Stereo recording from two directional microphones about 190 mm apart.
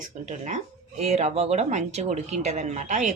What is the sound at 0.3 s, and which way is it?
Speech, 40° right (ahead or behind).